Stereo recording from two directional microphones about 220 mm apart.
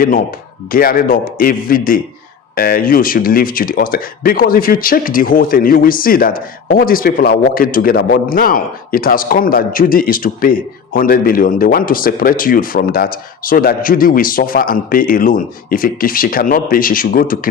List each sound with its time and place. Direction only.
0.0 s speech: 40° left (ahead or behind)